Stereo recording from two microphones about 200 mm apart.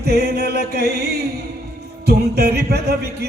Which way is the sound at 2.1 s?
55° right (ahead or behind).